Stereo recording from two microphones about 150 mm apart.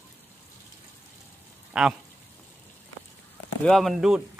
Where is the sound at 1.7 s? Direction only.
5° right (ahead or behind).